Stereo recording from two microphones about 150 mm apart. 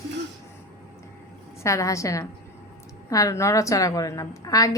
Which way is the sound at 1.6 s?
20° left (ahead or behind).